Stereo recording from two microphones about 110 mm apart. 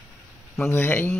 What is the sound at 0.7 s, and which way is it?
Speech, 20° left (ahead or behind).